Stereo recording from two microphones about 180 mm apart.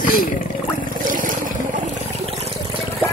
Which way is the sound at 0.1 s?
50° left (ahead or behind).